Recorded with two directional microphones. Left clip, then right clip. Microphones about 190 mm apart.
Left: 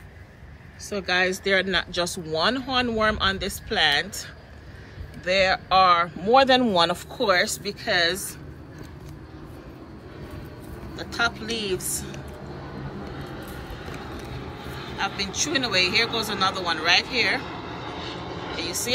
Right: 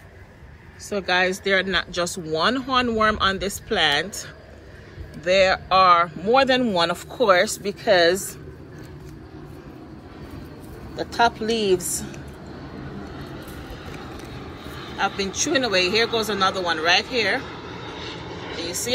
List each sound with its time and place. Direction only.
0.8 s speech: 5° left (ahead or behind)
11.1 s speech: centre (ahead or behind)
14.8 s speech: centre (ahead or behind)
17.9 s vehicle: 20° left (ahead or behind)
18.6 s speech: 5° left (ahead or behind)